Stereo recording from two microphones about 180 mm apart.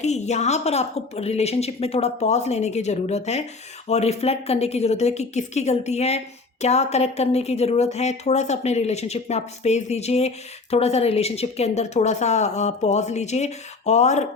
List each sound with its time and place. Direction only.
0.0 s speech: 40° left (ahead or behind)